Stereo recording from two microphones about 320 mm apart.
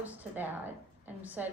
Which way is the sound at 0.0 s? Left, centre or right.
Centre.